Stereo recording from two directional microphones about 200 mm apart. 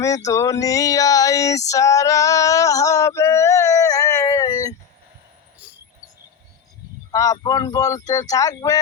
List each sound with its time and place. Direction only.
0.3 s female singing: 15° left (ahead or behind)
7.1 s speech: 15° left (ahead or behind)